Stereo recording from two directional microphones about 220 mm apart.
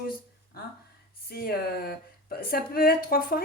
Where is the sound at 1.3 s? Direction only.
45° left (ahead or behind).